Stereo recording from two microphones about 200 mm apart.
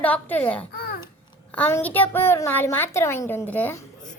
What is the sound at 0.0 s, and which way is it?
Speech, 10° left (ahead or behind).